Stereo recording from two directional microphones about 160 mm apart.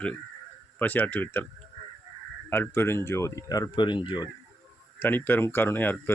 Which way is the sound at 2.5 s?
15° left (ahead or behind).